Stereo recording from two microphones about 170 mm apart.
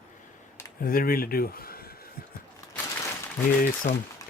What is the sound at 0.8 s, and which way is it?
Speech, 60° left (ahead or behind).